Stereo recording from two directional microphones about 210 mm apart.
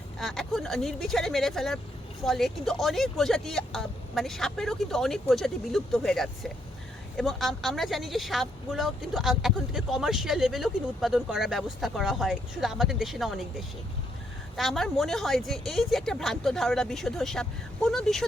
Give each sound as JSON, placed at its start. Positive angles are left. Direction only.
{"t": 0.2, "sound": "speech", "side_deg": 0}